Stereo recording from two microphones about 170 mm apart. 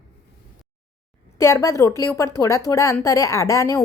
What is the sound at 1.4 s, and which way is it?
A woman's voice, 15° left (ahead or behind).